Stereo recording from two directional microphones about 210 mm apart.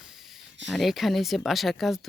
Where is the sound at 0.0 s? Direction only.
Centre (ahead or behind).